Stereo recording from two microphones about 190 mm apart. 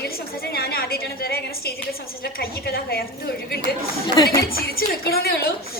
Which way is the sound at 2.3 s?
55° left (ahead or behind).